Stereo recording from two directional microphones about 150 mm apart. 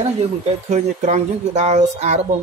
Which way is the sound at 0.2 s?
50° right (ahead or behind).